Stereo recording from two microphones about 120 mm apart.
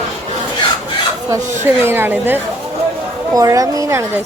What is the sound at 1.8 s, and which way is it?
Speech, 20° right (ahead or behind).